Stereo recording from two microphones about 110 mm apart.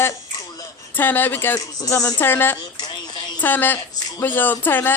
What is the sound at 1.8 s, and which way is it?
Speech, 35° left (ahead or behind).